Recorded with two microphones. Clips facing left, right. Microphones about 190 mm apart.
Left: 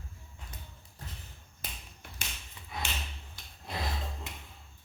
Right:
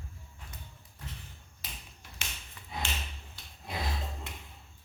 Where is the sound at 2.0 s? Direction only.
55° left (ahead or behind).